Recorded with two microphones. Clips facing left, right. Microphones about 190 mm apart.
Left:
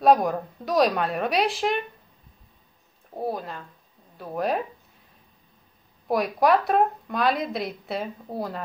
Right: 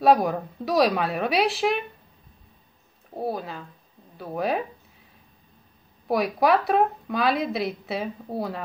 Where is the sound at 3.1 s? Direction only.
Centre (ahead or behind).